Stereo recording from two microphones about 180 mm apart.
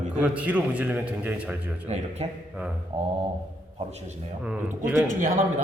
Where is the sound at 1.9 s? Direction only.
35° right (ahead or behind).